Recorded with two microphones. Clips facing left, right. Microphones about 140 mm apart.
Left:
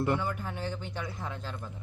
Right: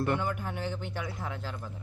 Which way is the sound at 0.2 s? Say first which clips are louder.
Right 1 dB; 15° right (ahead or behind).